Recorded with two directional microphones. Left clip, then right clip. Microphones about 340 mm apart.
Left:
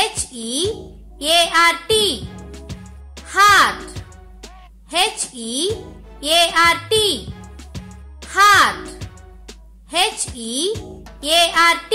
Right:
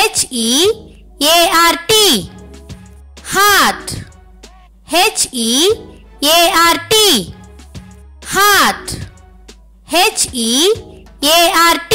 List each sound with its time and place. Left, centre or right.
0.0 s a child's voice: right
2.3 s music: centre
3.3 s a child's voice: right
4.8 s a child's voice: right
7.4 s music: centre
8.3 s a child's voice: right
9.8 s a child's voice: right